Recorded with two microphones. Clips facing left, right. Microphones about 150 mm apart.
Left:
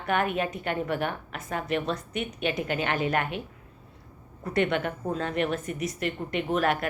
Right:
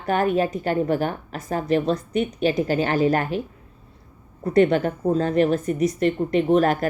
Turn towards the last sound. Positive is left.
turn(degrees=-35)  # may be behind; listen again after turning